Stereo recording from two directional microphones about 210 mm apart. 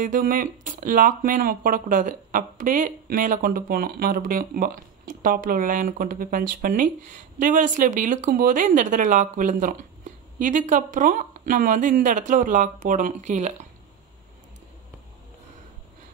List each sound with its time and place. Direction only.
0.0 s speech: 40° right (ahead or behind)